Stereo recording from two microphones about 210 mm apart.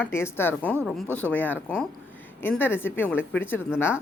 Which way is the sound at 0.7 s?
5° right (ahead or behind).